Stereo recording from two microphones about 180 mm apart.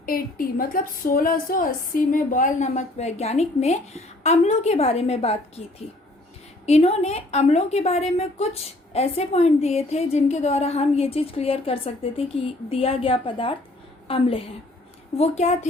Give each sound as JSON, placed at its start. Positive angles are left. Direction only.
{"t": 0.0, "sound": "a woman's voice", "side_deg": 55}
{"t": 6.7, "sound": "a woman's voice", "side_deg": 35}